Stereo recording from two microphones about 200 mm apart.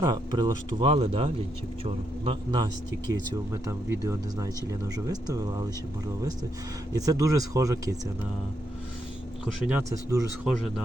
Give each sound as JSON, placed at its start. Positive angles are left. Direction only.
{"t": 0.0, "sound": "speech", "side_deg": -20}
{"t": 6.9, "sound": "speech", "side_deg": -15}
{"t": 9.5, "sound": "speech", "side_deg": -5}
{"t": 10.4, "sound": "speech", "side_deg": 5}